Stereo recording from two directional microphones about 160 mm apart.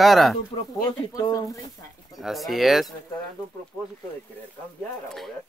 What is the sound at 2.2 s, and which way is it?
Speech, centre (ahead or behind).